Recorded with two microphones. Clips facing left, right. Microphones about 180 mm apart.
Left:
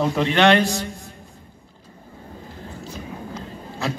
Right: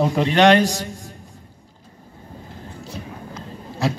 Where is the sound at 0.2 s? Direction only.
40° right (ahead or behind).